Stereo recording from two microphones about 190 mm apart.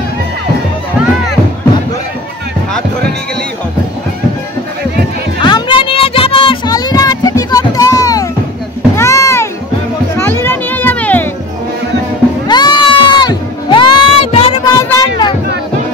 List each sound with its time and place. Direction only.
5.4 s child singing: 25° left (ahead or behind)
8.9 s music: 15° left (ahead or behind)
12.4 s music: 20° left (ahead or behind)
14.7 s a sound: 20° left (ahead or behind)